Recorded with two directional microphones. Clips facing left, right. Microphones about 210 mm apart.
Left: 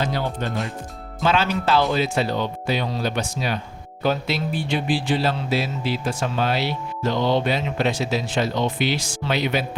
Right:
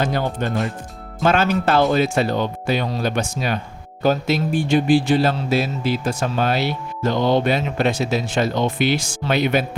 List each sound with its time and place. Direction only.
0.0 s speech: 50° right (ahead or behind)